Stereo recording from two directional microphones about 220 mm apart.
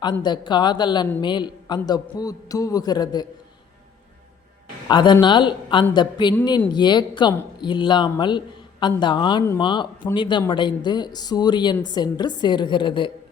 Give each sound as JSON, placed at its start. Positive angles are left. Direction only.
{"t": 0.0, "sound": "a man's voice", "side_deg": 20}
{"t": 4.9, "sound": "speech", "side_deg": 20}